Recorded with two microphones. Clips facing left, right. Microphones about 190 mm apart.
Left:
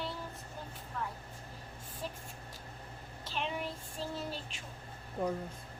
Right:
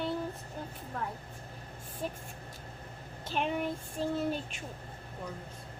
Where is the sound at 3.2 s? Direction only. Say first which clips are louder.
Right 6 dB; 50° right (ahead or behind).